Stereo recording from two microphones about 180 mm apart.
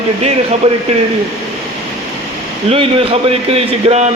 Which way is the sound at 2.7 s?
30° right (ahead or behind).